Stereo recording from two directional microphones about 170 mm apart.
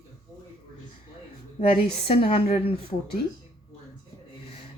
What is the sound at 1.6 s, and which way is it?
Speech, 35° left (ahead or behind).